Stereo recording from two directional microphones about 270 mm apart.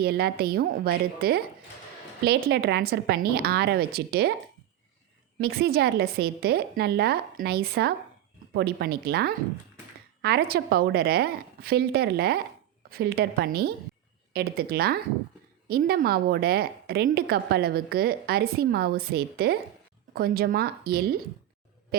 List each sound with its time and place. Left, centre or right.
0.0 s a woman's voice: right
5.4 s a woman's voice: right